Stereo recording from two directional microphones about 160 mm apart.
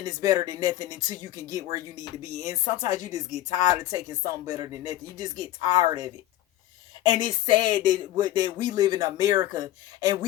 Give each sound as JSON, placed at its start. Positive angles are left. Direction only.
{"t": 0.0, "sound": "speech", "side_deg": -25}